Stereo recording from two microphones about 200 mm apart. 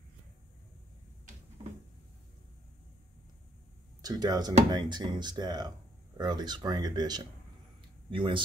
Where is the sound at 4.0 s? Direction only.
20° right (ahead or behind).